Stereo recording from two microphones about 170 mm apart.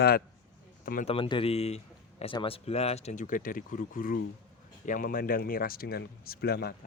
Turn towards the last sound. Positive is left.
turn(degrees=70)  # may be behind; listen again after turning